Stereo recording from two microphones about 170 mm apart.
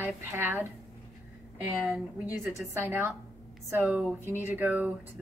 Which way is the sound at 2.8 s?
15° right (ahead or behind).